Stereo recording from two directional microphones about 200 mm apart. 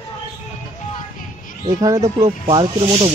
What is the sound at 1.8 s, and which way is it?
Speech, 15° right (ahead or behind).